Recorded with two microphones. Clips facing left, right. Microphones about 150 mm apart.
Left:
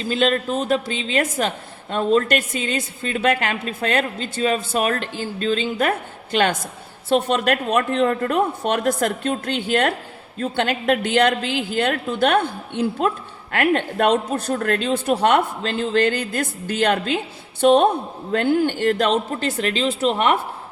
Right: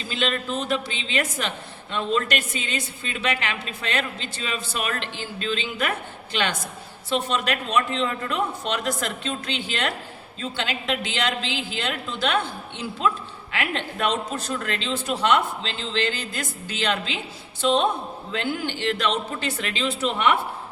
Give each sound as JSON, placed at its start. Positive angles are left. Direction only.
{"t": 0.0, "sound": "a woman's voice", "side_deg": 45}